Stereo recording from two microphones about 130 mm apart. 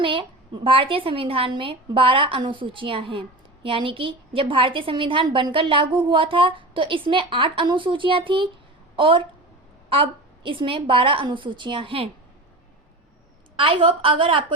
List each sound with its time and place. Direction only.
0.0 s a woman's voice: 40° right (ahead or behind)
13.6 s a woman's voice: 40° right (ahead or behind)